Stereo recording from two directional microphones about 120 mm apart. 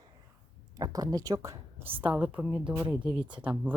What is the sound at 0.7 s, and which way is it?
Speech, 30° right (ahead or behind).